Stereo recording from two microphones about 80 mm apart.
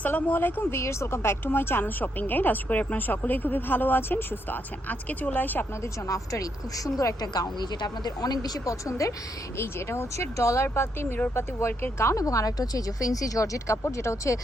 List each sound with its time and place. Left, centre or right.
0.0 s speech: centre
5.8 s speech: left
9.6 s speech: left